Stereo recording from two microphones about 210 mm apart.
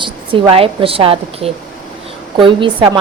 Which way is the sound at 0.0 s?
25° right (ahead or behind).